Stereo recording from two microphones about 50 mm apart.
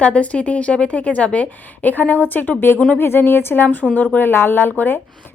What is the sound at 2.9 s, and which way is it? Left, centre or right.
Speech, left.